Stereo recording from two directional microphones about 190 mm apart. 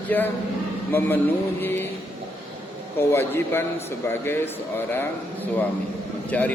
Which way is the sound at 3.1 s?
10° left (ahead or behind).